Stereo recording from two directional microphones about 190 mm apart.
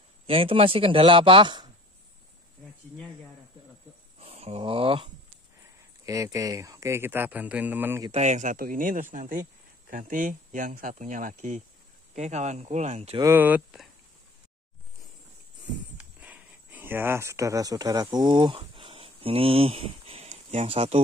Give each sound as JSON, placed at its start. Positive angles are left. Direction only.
{"t": 0.3, "sound": "speech", "side_deg": -30}
{"t": 4.2, "sound": "speech", "side_deg": -30}
{"t": 6.0, "sound": "speech", "side_deg": -15}
{"t": 8.1, "sound": "speech", "side_deg": -35}
{"t": 13.2, "sound": "speech", "side_deg": -10}
{"t": 16.0, "sound": "speech", "side_deg": -5}